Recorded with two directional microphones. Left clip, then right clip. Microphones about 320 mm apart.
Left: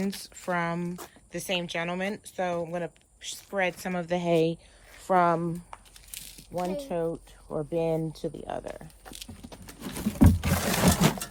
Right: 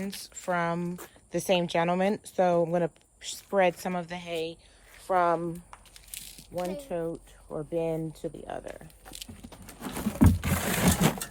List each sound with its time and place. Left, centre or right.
0.0 s speech: centre
4.3 s speech: centre
6.8 s speech: centre
8.0 s speech: left
8.4 s speech: centre
9.8 s patter: centre
10.2 s a sound: centre